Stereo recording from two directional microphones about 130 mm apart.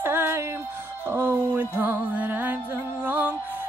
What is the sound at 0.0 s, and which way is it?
Music, 20° right (ahead or behind).